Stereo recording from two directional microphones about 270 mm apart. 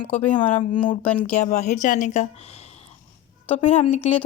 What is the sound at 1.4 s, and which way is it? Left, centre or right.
A woman's voice, left.